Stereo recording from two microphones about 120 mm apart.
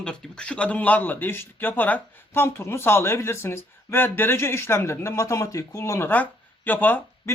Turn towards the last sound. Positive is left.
turn(degrees=15)  # may be behind; listen again after turning